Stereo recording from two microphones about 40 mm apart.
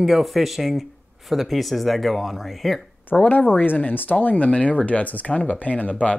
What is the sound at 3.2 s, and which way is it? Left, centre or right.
Speech, left.